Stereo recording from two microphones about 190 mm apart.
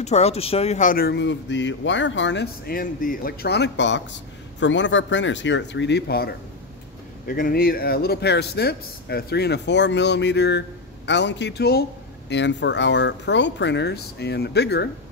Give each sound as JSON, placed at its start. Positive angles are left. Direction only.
{"t": 0.0, "sound": "speech", "side_deg": 35}